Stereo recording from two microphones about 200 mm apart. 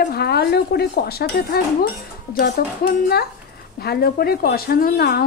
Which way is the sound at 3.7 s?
50° left (ahead or behind).